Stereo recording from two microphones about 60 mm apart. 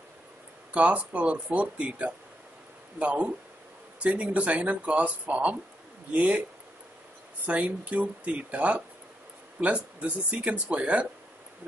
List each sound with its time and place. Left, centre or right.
0.7 s speech: right
7.4 s speech: right